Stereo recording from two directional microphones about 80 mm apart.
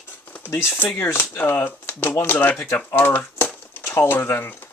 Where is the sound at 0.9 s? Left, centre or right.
Left.